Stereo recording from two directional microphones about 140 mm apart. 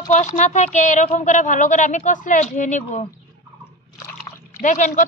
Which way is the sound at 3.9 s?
20° left (ahead or behind).